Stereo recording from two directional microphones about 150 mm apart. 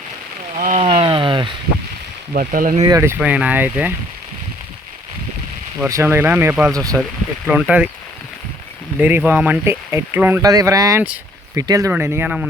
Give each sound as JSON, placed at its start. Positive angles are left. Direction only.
{"t": 0.5, "sound": "speech", "side_deg": -55}
{"t": 0.9, "sound": "a sound", "side_deg": -35}
{"t": 2.3, "sound": "speech", "side_deg": -65}
{"t": 2.8, "sound": "speech", "side_deg": -20}
{"t": 3.2, "sound": "speech", "side_deg": -10}
{"t": 5.9, "sound": "speech", "side_deg": -15}
{"t": 6.7, "sound": "speech", "side_deg": -20}
{"t": 7.4, "sound": "speech", "side_deg": -10}
{"t": 9.0, "sound": "speech", "side_deg": -10}